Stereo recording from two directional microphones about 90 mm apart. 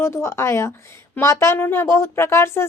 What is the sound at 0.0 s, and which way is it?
Speech, 30° left (ahead or behind).